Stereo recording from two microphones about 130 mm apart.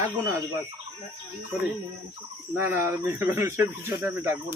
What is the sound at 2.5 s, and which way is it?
Speech, 15° right (ahead or behind).